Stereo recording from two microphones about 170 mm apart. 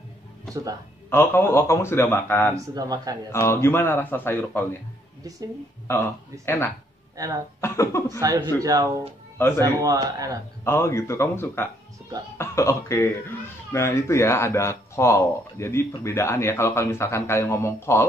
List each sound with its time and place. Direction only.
1.1 s speech: 15° left (ahead or behind)
2.5 s speech: 20° right (ahead or behind)
3.3 s speech: 15° left (ahead or behind)
6.4 s speech: 15° left (ahead or behind)
7.2 s speech: 20° right (ahead or behind)
7.6 s speech: 15° left (ahead or behind)
8.2 s speech: 20° right (ahead or behind)
9.4 s speech: 10° left (ahead or behind)
9.8 s speech: 20° right (ahead or behind)
10.6 s speech: 15° left (ahead or behind)